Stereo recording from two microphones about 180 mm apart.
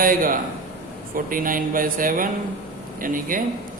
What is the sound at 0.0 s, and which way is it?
A man's voice, 50° right (ahead or behind).